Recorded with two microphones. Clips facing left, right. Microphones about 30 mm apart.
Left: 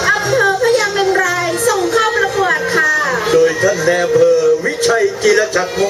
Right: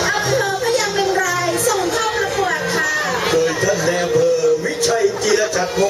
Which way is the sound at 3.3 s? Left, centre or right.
Centre.